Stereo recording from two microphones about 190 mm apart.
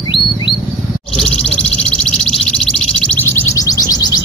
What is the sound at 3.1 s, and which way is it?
Music, 15° left (ahead or behind).